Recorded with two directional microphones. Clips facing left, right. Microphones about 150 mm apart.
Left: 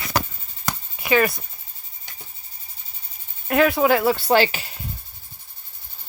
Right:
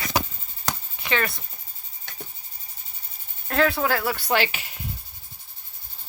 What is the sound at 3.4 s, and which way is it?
Speech, 15° left (ahead or behind).